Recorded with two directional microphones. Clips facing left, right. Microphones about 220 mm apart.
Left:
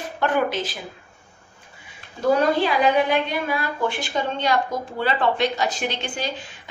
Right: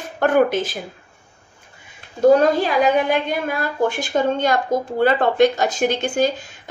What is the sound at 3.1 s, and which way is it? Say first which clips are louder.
A woman's voice: right 2 dB; 45° right (ahead or behind).